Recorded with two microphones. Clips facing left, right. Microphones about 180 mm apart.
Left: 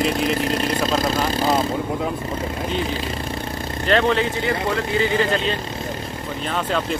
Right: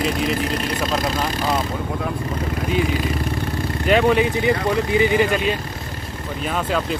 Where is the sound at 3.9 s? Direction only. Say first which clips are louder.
Right 2 dB; 10° right (ahead or behind).